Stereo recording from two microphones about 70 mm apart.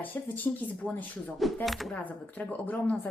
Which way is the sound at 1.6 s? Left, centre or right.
Centre.